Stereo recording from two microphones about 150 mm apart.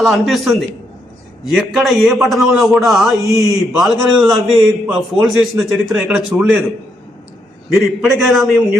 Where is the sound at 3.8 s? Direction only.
Centre (ahead or behind).